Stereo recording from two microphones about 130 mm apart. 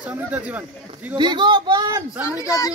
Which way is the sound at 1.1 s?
35° right (ahead or behind).